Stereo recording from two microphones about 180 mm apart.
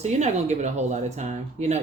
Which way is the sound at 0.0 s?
40° right (ahead or behind).